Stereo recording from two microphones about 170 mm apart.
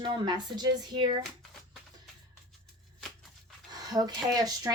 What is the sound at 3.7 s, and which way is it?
Speech, 25° right (ahead or behind).